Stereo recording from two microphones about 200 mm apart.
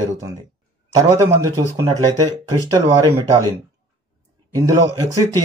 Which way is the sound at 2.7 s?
20° right (ahead or behind).